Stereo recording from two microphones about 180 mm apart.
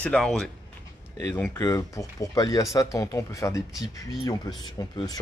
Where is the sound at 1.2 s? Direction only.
15° left (ahead or behind).